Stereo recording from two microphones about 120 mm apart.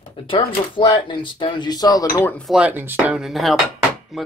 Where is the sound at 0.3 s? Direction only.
45° left (ahead or behind); by 2.3 s 30° left (ahead or behind).